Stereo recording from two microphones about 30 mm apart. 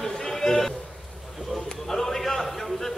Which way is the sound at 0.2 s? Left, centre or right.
Centre.